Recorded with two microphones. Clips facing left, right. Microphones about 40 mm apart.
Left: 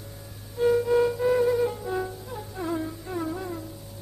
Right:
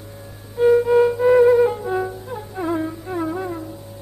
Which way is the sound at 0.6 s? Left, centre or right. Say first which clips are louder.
Right 7 dB; right.